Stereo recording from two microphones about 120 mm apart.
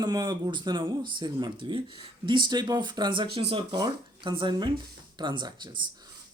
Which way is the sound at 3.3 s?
50° right (ahead or behind).